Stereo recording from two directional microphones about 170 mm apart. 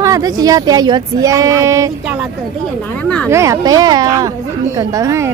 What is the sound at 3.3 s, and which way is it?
A woman's voice, 15° right (ahead or behind).